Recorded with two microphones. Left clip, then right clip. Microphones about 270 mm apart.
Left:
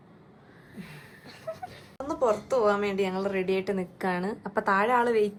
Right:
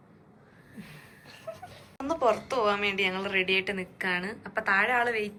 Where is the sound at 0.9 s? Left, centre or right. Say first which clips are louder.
Left 2 dB; left.